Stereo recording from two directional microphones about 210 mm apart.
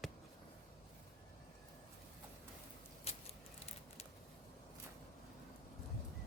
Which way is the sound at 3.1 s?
30° left (ahead or behind).